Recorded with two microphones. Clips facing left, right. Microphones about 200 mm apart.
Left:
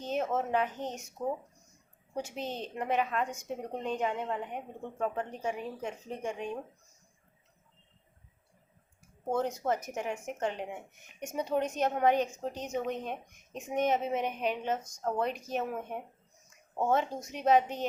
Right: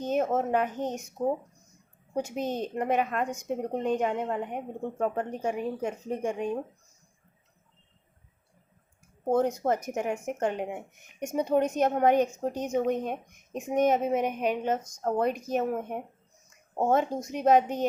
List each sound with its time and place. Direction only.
0.0 s a sound: 50° right (ahead or behind)
0.3 s a woman's voice: 50° right (ahead or behind)
2.1 s a woman's voice: 45° right (ahead or behind)
9.3 s a woman's voice: 50° right (ahead or behind)
17.3 s a woman's voice: 45° right (ahead or behind)